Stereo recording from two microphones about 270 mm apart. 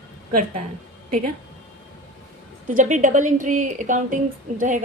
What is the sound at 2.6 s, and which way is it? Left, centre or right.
A woman's voice, right.